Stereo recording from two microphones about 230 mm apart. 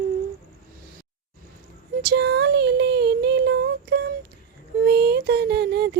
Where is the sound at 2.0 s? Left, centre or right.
Right.